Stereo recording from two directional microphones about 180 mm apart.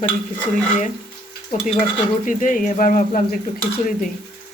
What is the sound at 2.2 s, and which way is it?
Speech, 45° left (ahead or behind).